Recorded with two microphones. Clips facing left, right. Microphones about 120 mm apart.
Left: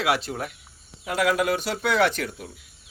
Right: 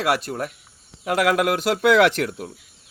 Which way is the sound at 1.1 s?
80° right.